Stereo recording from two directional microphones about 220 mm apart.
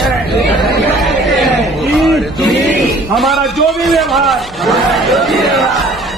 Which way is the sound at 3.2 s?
Centre (ahead or behind).